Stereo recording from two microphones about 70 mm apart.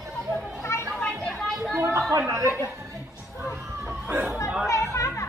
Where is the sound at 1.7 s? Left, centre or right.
Right.